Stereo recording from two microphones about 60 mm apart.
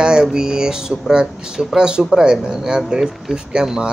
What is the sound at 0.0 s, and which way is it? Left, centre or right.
Speech, centre.